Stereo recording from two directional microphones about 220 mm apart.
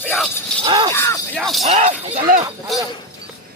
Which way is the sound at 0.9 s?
10° left (ahead or behind).